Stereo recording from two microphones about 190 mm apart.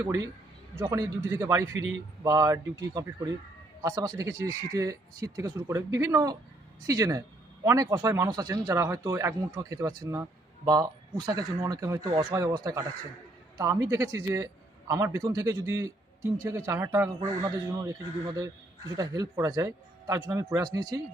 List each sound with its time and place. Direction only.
0.9 s a man's voice: 15° right (ahead or behind)